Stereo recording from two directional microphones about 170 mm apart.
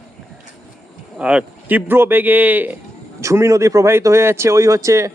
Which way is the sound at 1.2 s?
5° right (ahead or behind).